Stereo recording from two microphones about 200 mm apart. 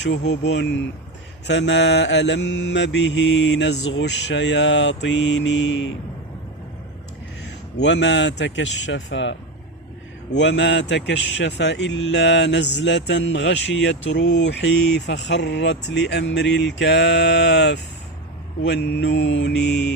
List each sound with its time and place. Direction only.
0.3 s speech: 60° left (ahead or behind)
7.8 s speech: 60° left (ahead or behind)
10.3 s speech: 60° left (ahead or behind)